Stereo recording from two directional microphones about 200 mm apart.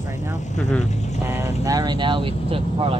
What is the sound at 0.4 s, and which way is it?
Speech, 35° left (ahead or behind).